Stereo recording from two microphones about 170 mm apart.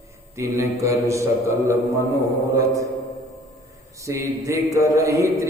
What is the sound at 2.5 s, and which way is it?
Mantra, 20° right (ahead or behind).